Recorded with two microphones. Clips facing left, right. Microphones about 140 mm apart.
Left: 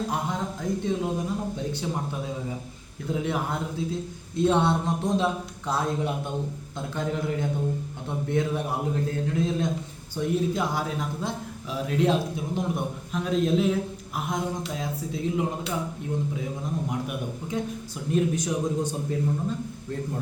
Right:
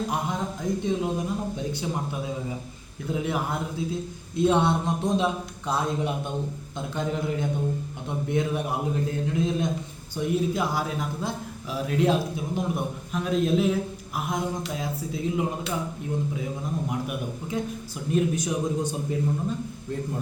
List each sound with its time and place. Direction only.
0.1 s a man's voice: 15° right (ahead or behind)
16.9 s a man's voice: 5° right (ahead or behind)